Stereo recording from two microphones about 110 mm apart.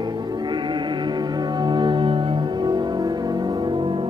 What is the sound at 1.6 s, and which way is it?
Music, 45° right (ahead or behind).